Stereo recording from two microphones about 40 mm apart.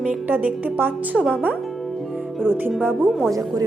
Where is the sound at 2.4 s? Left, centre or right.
Right.